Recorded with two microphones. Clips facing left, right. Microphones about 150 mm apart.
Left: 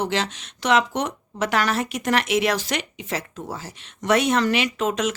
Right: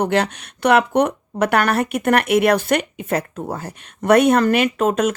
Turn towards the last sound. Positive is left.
turn(degrees=-50)  # may be behind; listen again after turning